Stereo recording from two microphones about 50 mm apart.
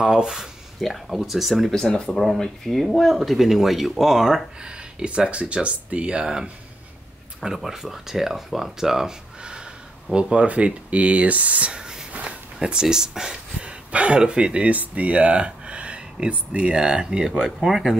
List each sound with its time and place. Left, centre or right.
0.0 s speech: centre
1.7 s speech: centre
4.6 s speech: right
12.1 s a sound: right
12.5 s speech: centre
17.6 s speech: centre